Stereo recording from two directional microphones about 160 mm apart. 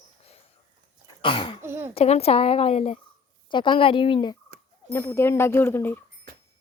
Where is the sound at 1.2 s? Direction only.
30° left (ahead or behind).